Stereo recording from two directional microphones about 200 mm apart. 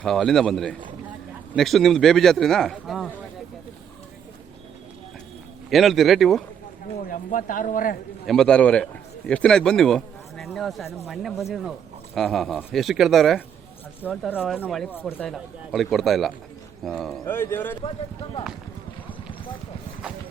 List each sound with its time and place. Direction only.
0.0 s a man's voice: 5° left (ahead or behind)
5.7 s a man's voice: centre (ahead or behind)
7.1 s speech: 40° left (ahead or behind)
8.3 s a man's voice: 5° left (ahead or behind)
17.2 s speech: 10° left (ahead or behind)